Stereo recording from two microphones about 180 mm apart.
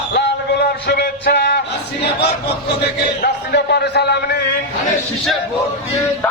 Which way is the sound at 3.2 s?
70° left (ahead or behind).